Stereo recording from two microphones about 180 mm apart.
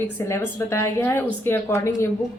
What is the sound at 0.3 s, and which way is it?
A woman's voice, 15° left (ahead or behind).